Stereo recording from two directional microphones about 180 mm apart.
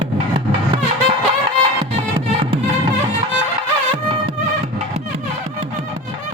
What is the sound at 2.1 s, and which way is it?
Music, 30° right (ahead or behind).